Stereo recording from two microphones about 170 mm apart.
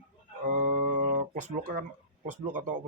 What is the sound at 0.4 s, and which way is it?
Music, 50° right (ahead or behind).